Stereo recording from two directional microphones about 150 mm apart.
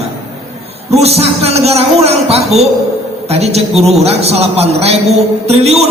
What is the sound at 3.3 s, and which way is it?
Speech, 45° right (ahead or behind).